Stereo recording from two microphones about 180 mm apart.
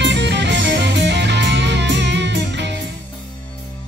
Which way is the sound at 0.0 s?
75° right (ahead or behind).